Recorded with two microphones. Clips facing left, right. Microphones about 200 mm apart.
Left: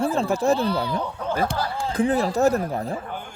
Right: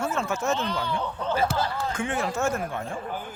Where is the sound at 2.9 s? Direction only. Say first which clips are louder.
Left 1 dB; 5° right (ahead or behind).